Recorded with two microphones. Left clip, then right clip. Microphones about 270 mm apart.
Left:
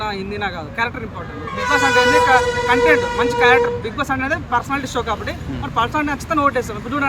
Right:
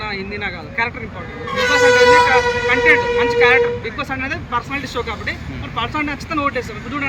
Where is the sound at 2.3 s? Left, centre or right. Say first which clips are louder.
Even; centre.